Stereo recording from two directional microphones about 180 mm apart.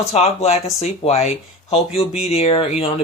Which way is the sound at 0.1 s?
35° left (ahead or behind).